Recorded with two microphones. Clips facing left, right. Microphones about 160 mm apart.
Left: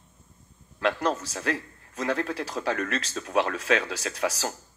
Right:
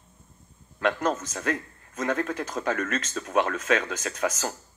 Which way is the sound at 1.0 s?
35° left (ahead or behind).